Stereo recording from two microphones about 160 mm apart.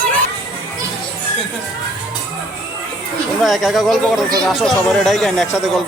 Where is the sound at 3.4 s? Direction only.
Centre (ahead or behind).